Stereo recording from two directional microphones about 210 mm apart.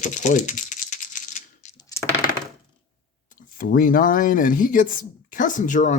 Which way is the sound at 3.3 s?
40° left (ahead or behind).